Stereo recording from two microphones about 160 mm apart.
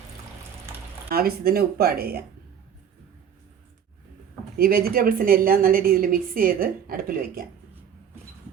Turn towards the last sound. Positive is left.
turn(degrees=-65)  # may be behind; listen again after turning